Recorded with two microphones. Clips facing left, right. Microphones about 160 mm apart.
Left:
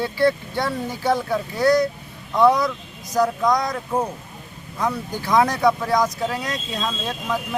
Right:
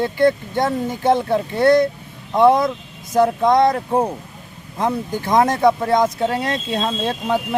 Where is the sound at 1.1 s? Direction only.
25° right (ahead or behind).